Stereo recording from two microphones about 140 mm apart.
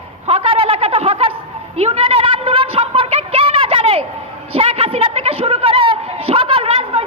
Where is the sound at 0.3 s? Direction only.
45° right (ahead or behind).